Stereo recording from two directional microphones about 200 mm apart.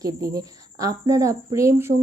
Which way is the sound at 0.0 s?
15° right (ahead or behind).